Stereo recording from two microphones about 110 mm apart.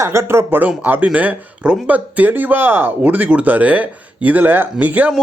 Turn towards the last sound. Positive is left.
turn(degrees=-15)  # may be behind; listen again after turning